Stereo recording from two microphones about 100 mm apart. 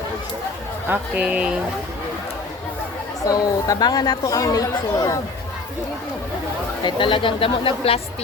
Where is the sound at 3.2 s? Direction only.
40° left (ahead or behind).